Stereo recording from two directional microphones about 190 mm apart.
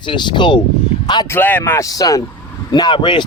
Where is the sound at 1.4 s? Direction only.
10° left (ahead or behind); by 3.3 s 25° left (ahead or behind).